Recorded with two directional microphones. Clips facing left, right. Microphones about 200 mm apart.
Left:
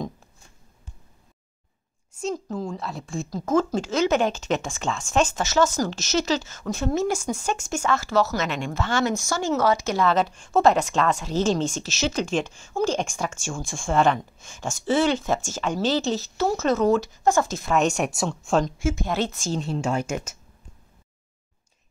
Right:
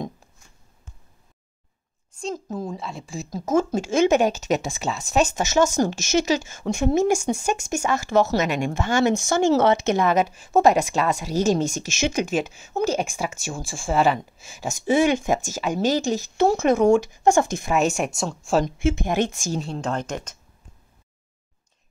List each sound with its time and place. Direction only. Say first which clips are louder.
2.7 s speech: left 1 dB; centre (ahead or behind)
19.0 s speech: right 3 dB; 15° right (ahead or behind)
19.6 s speech: left 2 dB; 5° left (ahead or behind)